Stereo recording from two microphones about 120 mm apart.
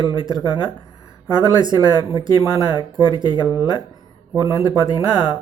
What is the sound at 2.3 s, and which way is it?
Speech, 30° left (ahead or behind).